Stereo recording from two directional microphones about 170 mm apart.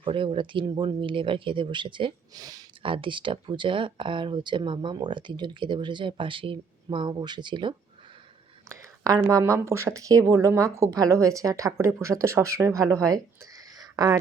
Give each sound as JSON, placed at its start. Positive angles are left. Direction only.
{"t": 0.0, "sound": "speech", "side_deg": -30}